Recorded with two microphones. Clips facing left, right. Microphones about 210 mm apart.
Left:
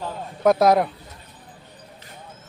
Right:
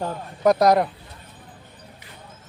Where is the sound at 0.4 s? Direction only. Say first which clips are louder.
Even; centre (ahead or behind).